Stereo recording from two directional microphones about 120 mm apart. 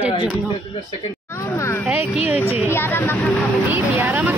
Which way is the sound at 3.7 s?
25° right (ahead or behind).